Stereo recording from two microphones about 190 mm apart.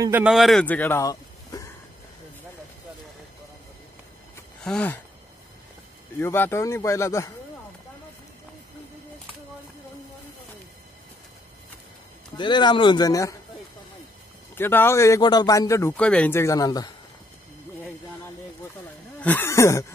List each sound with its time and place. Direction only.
0.0 s a man's voice: 10° right (ahead or behind); by 1.7 s 15° left (ahead or behind)
4.6 s a man's voice: 5° left (ahead or behind)
6.1 s a man's voice: 10° left (ahead or behind)
12.4 s speech: 25° left (ahead or behind)
14.5 s a man's voice: 10° left (ahead or behind)
19.1 s speech: 10° left (ahead or behind)